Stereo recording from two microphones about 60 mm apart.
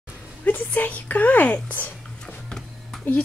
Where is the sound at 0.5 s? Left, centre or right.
Left.